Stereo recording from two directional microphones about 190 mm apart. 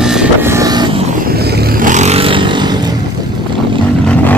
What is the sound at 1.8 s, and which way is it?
Vehicle, 40° right (ahead or behind).